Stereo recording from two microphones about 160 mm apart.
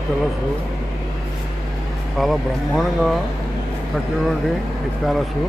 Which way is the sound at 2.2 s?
Centre (ahead or behind).